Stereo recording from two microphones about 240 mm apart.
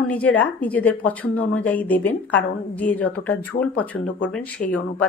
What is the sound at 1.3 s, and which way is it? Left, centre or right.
Speech, left.